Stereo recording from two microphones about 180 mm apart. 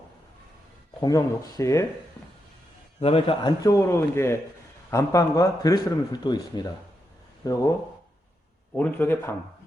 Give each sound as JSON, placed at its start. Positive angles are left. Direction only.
{"t": 1.0, "sound": "speech", "side_deg": 20}
{"t": 3.0, "sound": "a man's voice", "side_deg": 30}
{"t": 3.6, "sound": "a man's voice", "side_deg": 15}
{"t": 8.7, "sound": "speech", "side_deg": 10}